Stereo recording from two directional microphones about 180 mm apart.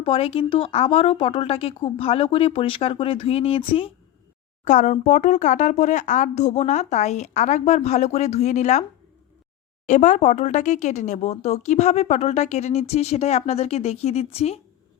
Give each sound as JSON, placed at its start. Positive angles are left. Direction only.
{"t": 0.0, "sound": "speech", "side_deg": 30}
{"t": 4.6, "sound": "speech", "side_deg": 45}
{"t": 9.8, "sound": "speech", "side_deg": 40}